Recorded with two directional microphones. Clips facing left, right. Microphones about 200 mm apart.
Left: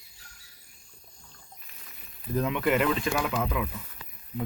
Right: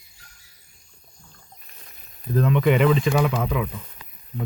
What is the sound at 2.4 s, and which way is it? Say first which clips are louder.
Speech: right 6 dB; 10° left (ahead or behind).